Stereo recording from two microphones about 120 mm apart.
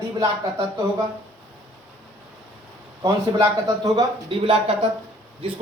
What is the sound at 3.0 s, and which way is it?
A man's voice, 30° right (ahead or behind).